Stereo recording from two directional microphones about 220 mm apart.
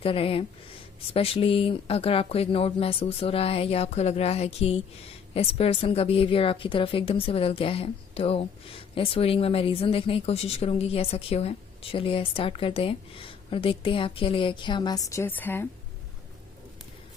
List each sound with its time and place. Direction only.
0.0 s a woman's voice: 25° left (ahead or behind); by 15.6 s 10° left (ahead or behind)